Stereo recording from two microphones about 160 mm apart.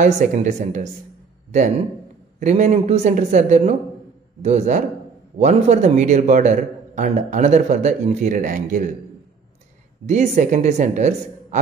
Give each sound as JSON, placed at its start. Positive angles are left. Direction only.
{"t": 0.0, "sound": "a man's voice", "side_deg": -50}
{"t": 2.4, "sound": "a man's voice", "side_deg": -45}
{"t": 10.0, "sound": "a man's voice", "side_deg": -45}